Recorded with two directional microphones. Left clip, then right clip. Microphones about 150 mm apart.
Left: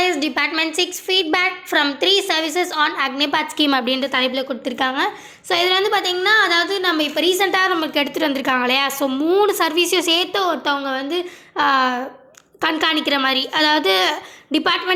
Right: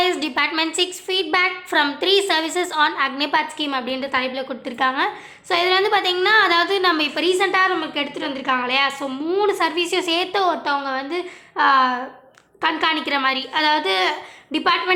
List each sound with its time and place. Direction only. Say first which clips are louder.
0.0 s a woman's voice: left 1 dB; 10° left (ahead or behind)
3.4 s speech: left 6 dB; 35° left (ahead or behind); by 7.3 s 5° left (ahead or behind)
7.3 s a woman's voice: even; 20° left (ahead or behind)
10.3 s a woman's voice: even; 10° left (ahead or behind)